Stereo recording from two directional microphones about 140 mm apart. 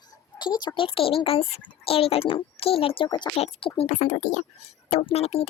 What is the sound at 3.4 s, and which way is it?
Speech, 45° left (ahead or behind).